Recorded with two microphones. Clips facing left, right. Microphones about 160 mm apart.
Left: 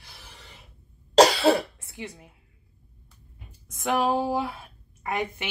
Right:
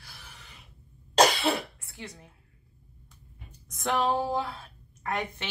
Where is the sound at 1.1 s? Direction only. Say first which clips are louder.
Left 6 dB; 30° left (ahead or behind).